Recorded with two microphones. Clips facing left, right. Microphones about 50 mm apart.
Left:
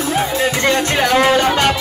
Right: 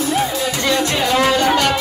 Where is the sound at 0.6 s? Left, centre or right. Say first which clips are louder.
Left 1 dB; left.